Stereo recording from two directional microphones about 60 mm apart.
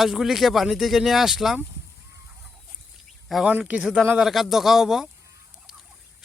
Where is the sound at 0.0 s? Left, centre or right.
Centre.